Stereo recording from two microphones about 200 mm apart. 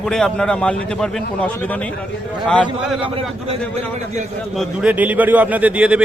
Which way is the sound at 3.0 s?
30° right (ahead or behind).